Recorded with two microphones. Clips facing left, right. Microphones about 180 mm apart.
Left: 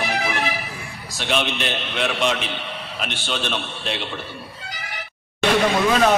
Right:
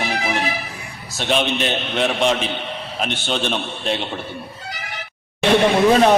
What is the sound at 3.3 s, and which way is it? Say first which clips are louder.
Speech: right 3 dB; 50° right (ahead or behind).